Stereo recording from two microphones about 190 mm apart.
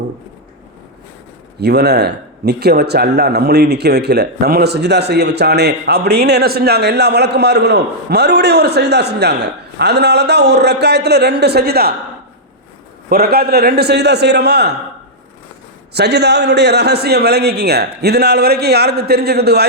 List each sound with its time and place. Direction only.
1.6 s speech: 60° right (ahead or behind)
13.1 s speech: 55° right (ahead or behind)
15.9 s speech: 60° right (ahead or behind)